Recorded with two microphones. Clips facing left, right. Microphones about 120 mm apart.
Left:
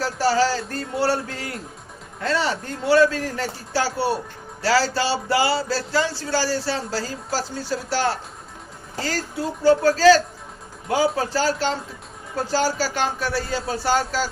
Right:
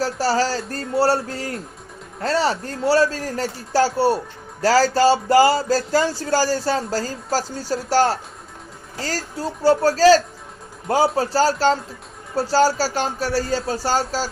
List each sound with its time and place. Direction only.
0.0 s speech: 40° right (ahead or behind)